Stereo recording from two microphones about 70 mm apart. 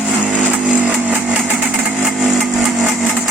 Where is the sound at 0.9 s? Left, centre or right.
Right.